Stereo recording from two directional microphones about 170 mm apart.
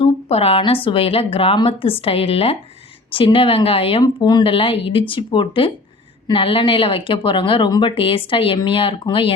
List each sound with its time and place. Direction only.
0.0 s a sound: 35° left (ahead or behind)
0.9 s speech: 35° left (ahead or behind)
4.0 s speech: 25° left (ahead or behind)